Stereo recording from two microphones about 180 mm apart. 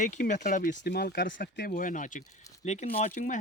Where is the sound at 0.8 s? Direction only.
60° left (ahead or behind).